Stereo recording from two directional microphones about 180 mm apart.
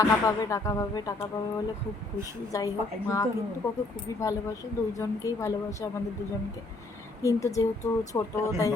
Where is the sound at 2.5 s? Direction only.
20° left (ahead or behind).